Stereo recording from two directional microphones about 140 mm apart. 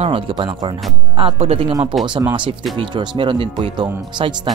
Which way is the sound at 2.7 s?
35° right (ahead or behind).